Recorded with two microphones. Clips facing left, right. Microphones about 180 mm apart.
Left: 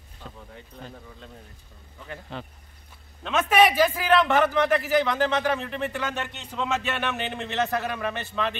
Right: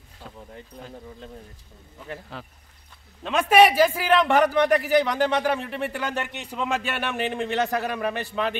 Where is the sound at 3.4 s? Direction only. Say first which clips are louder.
Right 3 dB; 30° right (ahead or behind).